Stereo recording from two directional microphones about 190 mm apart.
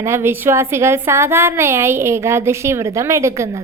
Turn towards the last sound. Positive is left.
turn(degrees=-15)  # may be behind; listen again after turning